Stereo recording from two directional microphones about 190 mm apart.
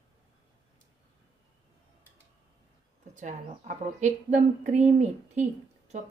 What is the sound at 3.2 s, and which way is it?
Speech, 40° right (ahead or behind).